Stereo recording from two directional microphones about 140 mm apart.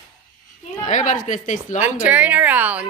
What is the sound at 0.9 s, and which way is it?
Speech, 60° left (ahead or behind).